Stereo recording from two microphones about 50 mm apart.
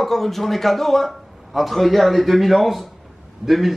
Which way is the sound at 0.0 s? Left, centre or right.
Centre.